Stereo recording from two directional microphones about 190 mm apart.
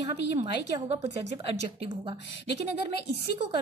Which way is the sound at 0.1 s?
35° right (ahead or behind).